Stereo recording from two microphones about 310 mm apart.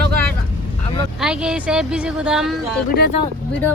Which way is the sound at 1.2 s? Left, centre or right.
Centre.